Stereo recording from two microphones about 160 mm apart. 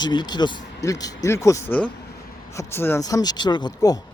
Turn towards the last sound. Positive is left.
turn(degrees=25)  # may be behind; listen again after turning